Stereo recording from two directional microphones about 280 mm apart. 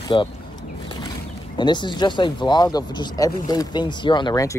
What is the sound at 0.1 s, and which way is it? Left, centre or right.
Speech, centre.